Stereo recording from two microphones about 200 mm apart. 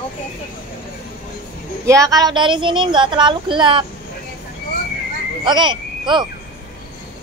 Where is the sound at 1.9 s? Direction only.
15° right (ahead or behind).